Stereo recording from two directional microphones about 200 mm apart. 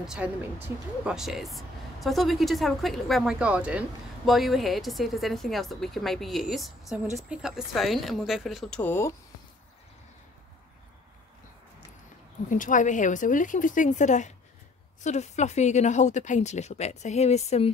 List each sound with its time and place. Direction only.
0.0 s speech: 5° right (ahead or behind)
12.4 s speech: 40° left (ahead or behind)